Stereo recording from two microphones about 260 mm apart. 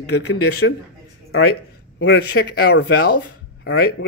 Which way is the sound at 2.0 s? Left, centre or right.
Left.